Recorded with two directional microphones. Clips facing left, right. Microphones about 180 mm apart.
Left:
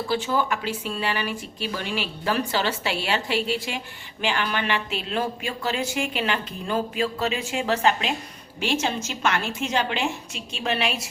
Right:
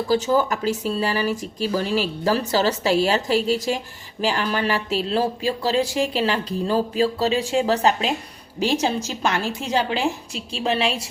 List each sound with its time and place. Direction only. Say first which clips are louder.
0.1 s speech: right 5 dB; 40° right (ahead or behind)